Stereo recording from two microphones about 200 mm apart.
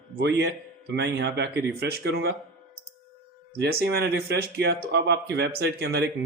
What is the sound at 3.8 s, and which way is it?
Speech, 55° right (ahead or behind).